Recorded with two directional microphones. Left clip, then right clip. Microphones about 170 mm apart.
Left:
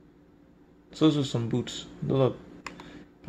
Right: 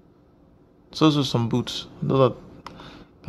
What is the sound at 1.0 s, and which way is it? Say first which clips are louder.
A man's voice: right 5 dB; 35° right (ahead or behind).